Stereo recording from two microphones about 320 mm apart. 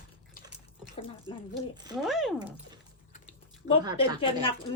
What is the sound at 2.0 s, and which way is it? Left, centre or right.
Speech, centre.